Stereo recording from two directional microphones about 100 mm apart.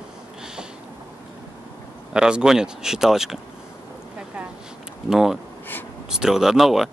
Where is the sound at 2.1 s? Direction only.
10° right (ahead or behind).